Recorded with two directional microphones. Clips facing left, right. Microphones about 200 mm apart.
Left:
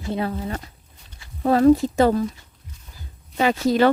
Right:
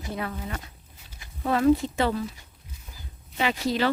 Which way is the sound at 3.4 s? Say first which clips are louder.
Left 7 dB; 45° left (ahead or behind).